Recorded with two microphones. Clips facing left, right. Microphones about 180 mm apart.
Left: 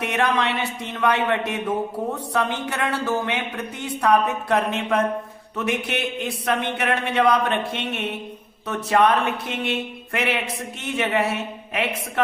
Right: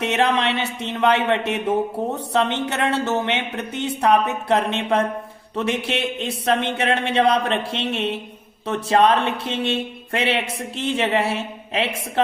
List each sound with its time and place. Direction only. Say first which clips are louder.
0.0 s speech: right 2 dB; 25° right (ahead or behind)